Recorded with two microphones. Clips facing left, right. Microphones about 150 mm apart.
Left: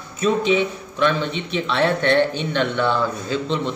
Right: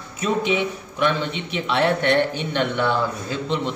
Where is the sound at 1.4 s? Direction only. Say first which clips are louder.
Left 1 dB; 15° right (ahead or behind).